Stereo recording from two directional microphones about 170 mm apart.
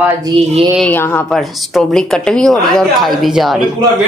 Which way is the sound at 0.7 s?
10° left (ahead or behind).